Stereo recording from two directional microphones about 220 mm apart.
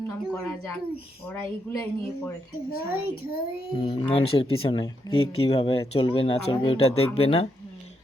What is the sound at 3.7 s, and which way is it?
Speech, 25° left (ahead or behind).